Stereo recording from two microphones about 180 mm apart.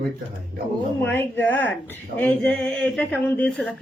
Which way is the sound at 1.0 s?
10° left (ahead or behind).